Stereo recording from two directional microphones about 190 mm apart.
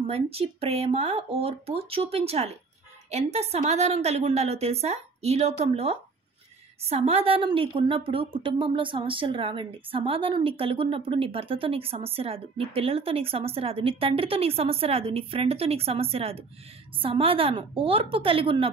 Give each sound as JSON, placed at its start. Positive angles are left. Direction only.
{"t": 0.0, "sound": "a woman's voice", "side_deg": -30}